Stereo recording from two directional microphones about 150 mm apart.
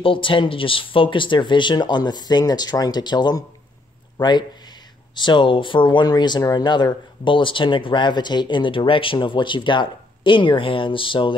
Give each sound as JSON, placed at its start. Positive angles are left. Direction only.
{"t": 0.0, "sound": "a man's voice", "side_deg": 35}